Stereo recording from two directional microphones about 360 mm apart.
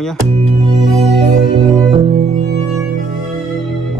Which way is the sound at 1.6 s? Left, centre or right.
Centre.